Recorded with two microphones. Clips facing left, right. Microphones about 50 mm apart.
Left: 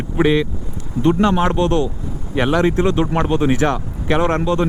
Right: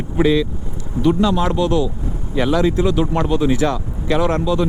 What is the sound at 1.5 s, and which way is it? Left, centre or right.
Speech, left.